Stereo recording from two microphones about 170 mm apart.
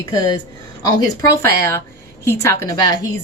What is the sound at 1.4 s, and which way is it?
Speech, 15° left (ahead or behind).